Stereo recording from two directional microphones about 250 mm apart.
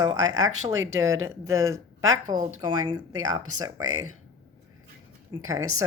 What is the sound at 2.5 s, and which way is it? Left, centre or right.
Speech, right.